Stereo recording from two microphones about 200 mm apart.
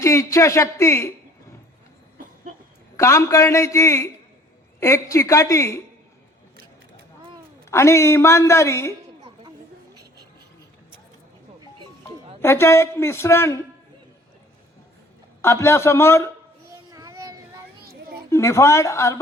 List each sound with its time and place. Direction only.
0.0 s a man's voice: 15° left (ahead or behind)
3.0 s a man's voice: 15° left (ahead or behind)
7.7 s a man's voice: 15° left (ahead or behind)
12.4 s a man's voice: 15° left (ahead or behind)
15.4 s a man's voice: 15° left (ahead or behind)
16.9 s a sound: 20° right (ahead or behind)
18.3 s a man's voice: 15° left (ahead or behind)